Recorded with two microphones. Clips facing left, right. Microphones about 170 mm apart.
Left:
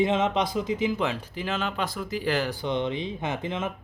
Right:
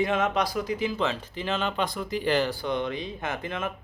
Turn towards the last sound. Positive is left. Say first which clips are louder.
# left 2 dB
turn(degrees=20)  # may be behind; listen again after turning